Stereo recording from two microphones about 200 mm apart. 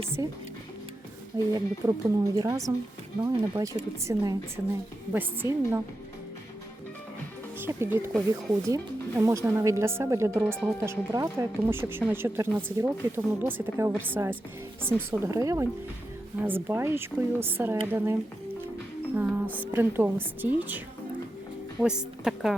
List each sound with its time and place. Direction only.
0.2 s speech: 15° right (ahead or behind)
1.5 s speech: 20° right (ahead or behind)
7.6 s a woman's voice: 10° right (ahead or behind)